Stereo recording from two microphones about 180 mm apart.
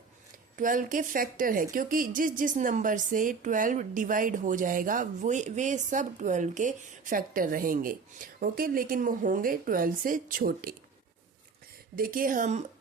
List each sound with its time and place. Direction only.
0.5 s a woman's voice: 45° right (ahead or behind)
11.9 s a woman's voice: 50° right (ahead or behind)